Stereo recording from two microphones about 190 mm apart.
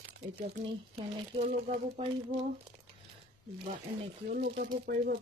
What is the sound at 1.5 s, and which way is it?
Speech, 35° right (ahead or behind).